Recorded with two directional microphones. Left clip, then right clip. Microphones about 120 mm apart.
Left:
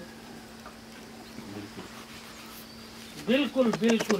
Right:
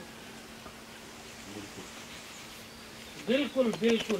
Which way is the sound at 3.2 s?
40° left (ahead or behind).